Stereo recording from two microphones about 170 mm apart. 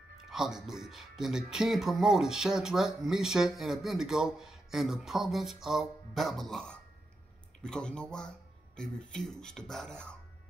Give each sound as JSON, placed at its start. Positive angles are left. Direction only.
{"t": 0.3, "sound": "speech", "side_deg": 0}